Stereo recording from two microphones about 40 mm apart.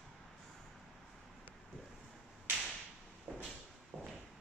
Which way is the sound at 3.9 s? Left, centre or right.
Centre.